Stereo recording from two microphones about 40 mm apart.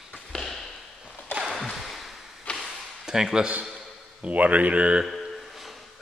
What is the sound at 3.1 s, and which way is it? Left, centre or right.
Speech, centre.